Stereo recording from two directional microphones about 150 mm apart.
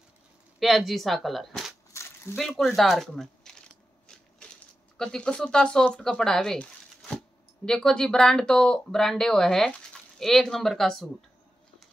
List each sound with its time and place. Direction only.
0.6 s speech: centre (ahead or behind)
4.4 s a sound: 5° left (ahead or behind)
4.9 s speech: 5° left (ahead or behind)